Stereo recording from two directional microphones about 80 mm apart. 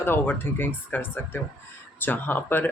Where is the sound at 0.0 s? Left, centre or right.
Left.